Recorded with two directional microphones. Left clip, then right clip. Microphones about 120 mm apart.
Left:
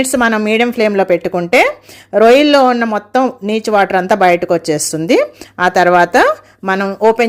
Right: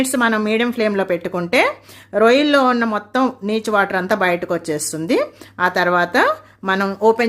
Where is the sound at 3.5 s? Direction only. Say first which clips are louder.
Left 7 dB; 35° left (ahead or behind).